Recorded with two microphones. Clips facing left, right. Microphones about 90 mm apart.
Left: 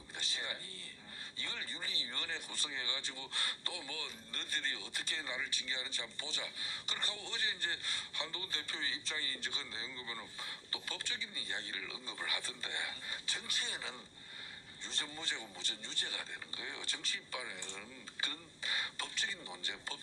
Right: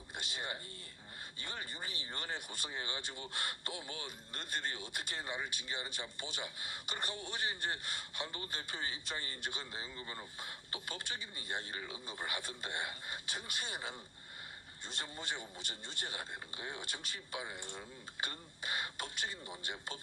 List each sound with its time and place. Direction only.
0.2 s speech: 15° right (ahead or behind)
1.7 s speech: 15° right (ahead or behind)
10.4 s speech: 15° right (ahead or behind)